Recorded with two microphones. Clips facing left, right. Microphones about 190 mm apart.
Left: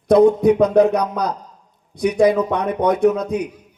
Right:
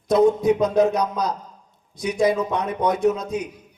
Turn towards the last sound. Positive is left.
turn(degrees=60)  # may be behind; listen again after turning